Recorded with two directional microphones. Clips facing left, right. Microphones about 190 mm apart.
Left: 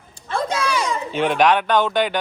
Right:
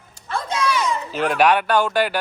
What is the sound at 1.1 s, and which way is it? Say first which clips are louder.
Speech: left 1 dB; centre (ahead or behind).